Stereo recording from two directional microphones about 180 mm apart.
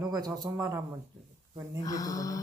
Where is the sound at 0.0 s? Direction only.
20° right (ahead or behind).